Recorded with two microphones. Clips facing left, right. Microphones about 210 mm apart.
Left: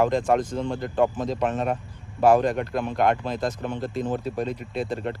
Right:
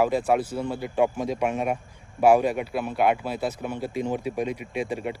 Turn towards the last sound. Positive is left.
turn(degrees=-10)  # may be behind; listen again after turning